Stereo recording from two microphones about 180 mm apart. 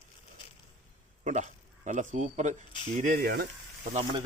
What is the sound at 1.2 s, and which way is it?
Speech, 40° right (ahead or behind).